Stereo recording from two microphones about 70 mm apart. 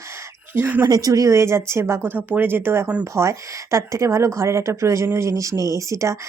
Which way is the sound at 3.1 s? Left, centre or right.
Right.